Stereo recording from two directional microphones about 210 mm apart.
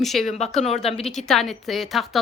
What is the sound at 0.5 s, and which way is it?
Speech, 30° left (ahead or behind).